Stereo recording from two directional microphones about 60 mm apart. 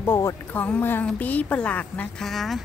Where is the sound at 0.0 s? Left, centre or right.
Left.